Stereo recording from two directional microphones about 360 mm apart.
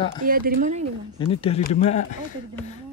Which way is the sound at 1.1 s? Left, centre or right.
Centre.